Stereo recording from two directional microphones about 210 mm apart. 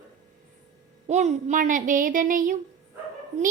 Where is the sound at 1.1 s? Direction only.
35° right (ahead or behind).